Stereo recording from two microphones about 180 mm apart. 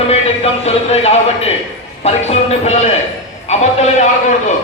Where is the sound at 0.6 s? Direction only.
35° left (ahead or behind).